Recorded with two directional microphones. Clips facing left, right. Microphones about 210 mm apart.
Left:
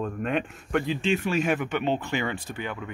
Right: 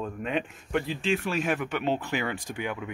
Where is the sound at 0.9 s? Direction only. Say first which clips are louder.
Left 3 dB; centre (ahead or behind).